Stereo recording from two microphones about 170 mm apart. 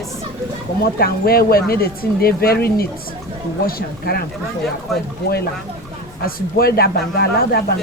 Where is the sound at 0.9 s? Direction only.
65° left (ahead or behind).